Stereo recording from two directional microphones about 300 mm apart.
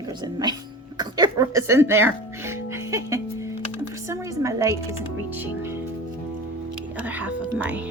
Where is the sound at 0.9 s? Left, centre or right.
Centre.